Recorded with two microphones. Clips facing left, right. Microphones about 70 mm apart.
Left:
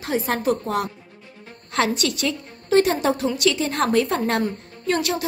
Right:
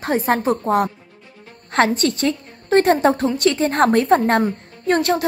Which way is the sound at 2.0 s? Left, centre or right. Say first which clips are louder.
Right 5 dB; right.